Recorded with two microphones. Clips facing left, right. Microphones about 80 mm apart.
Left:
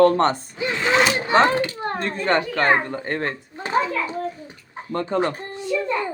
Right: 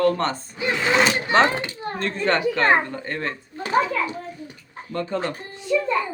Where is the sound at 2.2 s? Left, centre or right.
Centre.